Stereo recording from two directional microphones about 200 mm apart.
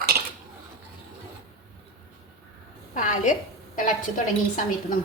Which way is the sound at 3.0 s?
40° left (ahead or behind).